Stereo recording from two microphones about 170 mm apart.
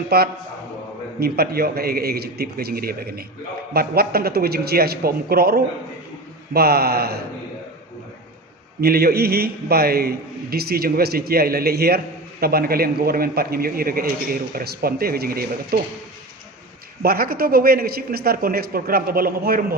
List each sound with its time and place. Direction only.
0.1 s a man's voice: 65° right (ahead or behind)
8.8 s a man's voice: 65° right (ahead or behind)
17.0 s a man's voice: 60° right (ahead or behind)